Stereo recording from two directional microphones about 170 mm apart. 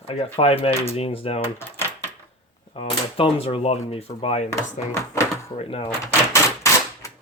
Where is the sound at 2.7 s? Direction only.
35° left (ahead or behind).